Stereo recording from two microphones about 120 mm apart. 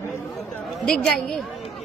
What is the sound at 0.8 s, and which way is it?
Speech, centre (ahead or behind).